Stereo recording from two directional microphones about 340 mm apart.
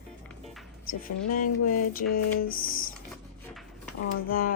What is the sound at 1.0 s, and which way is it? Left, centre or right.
Music, left.